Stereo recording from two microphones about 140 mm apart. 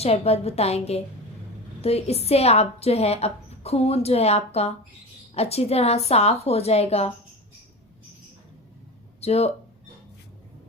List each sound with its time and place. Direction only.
0.0 s a woman's voice: 50° left (ahead or behind)
9.2 s a woman's voice: 50° left (ahead or behind)